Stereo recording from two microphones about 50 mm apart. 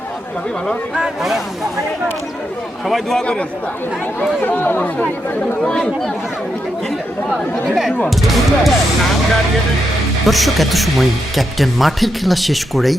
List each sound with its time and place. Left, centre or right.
0.9 s speech: centre
2.8 s speech: centre
4.4 s speech: left
5.6 s speech: centre
8.1 s speech: centre
10.2 s speech: centre